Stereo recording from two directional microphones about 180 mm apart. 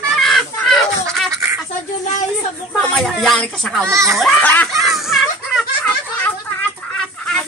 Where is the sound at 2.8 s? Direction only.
Centre (ahead or behind).